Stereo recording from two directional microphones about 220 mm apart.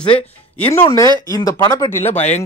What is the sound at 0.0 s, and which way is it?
Speech, 25° left (ahead or behind).